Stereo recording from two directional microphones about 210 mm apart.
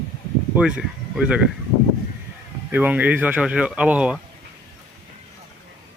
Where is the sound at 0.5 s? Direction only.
5° right (ahead or behind).